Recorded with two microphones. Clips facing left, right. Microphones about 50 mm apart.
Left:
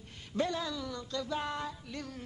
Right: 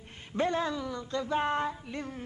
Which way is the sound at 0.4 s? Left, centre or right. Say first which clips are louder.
Right 4 dB; right.